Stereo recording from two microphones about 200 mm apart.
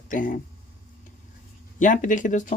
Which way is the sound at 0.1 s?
40° left (ahead or behind).